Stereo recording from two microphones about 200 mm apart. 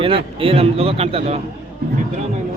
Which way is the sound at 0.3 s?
30° right (ahead or behind).